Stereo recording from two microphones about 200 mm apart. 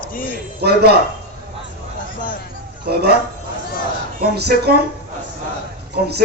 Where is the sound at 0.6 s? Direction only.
55° right (ahead or behind).